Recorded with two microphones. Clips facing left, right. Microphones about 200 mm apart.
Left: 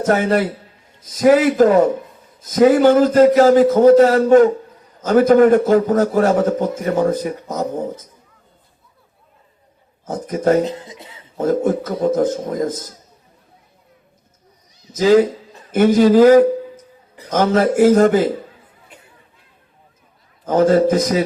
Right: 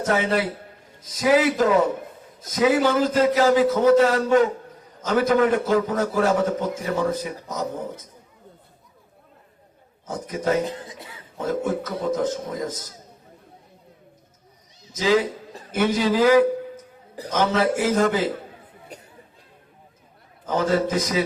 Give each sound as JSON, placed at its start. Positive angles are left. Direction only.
{"t": 0.1, "sound": "a man's voice", "side_deg": 45}
{"t": 10.1, "sound": "a man's voice", "side_deg": 50}
{"t": 10.6, "sound": "speech", "side_deg": 20}
{"t": 11.3, "sound": "a man's voice", "side_deg": 45}
{"t": 14.9, "sound": "a man's voice", "side_deg": 45}
{"t": 18.9, "sound": "chatter", "side_deg": -40}
{"t": 20.5, "sound": "a man's voice", "side_deg": 45}